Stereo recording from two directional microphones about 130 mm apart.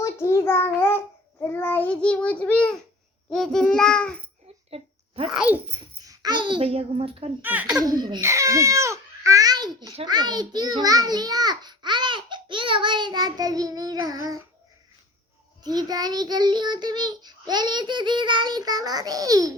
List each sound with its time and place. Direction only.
0.0 s child singing: 20° left (ahead or behind)
5.3 s a child's voice: 5° right (ahead or behind)
6.1 s a child's voice: 35° right (ahead or behind); by 7.3 s 50° right (ahead or behind)
7.4 s a child's voice: 15° right (ahead or behind)
7.8 s a child's voice: 30° right (ahead or behind)
8.2 s a child's voice: 25° right (ahead or behind)
15.6 s a child's voice: 30° right (ahead or behind)